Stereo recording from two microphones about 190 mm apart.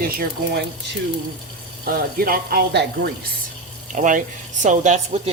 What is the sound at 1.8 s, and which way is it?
Speech, 50° right (ahead or behind).